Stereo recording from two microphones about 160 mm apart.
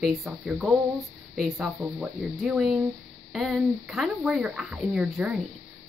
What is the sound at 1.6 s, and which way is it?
A woman's voice, 10° right (ahead or behind).